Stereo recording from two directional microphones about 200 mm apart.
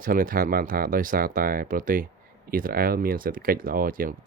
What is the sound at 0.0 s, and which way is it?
Speech, 45° right (ahead or behind).